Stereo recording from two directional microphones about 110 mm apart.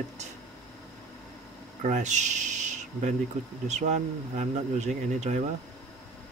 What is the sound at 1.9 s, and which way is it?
Speech, 90° right.